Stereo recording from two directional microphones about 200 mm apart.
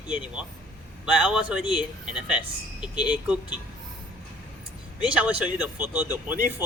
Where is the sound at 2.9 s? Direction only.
20° left (ahead or behind).